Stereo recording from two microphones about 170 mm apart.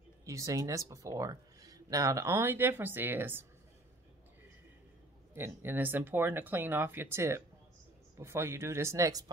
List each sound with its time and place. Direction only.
0.2 s speech: 20° right (ahead or behind)
5.3 s speech: 15° right (ahead or behind)